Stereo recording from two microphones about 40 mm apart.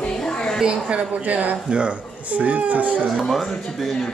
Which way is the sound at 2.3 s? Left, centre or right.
Right.